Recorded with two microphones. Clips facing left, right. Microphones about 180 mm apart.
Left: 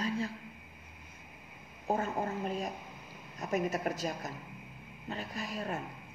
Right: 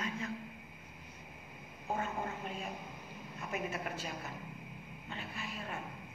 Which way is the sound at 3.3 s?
40° left (ahead or behind).